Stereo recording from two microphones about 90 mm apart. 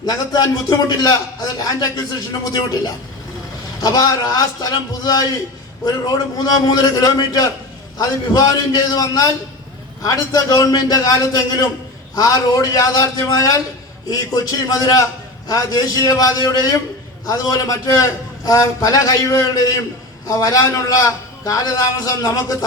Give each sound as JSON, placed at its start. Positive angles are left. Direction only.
{"t": 0.0, "sound": "a man's voice", "side_deg": 45}